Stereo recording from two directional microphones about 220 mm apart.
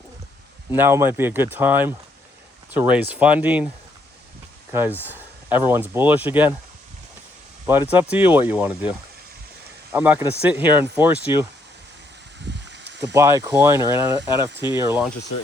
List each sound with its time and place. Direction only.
0.7 s speech: 10° right (ahead or behind)
4.7 s speech: 10° right (ahead or behind)
7.7 s speech: 10° right (ahead or behind)
9.9 s speech: 10° right (ahead or behind)
12.5 s a sound: 50° right (ahead or behind)
13.1 s speech: 15° right (ahead or behind)